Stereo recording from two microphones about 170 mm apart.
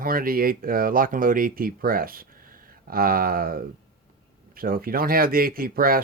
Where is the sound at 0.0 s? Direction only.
60° right (ahead or behind).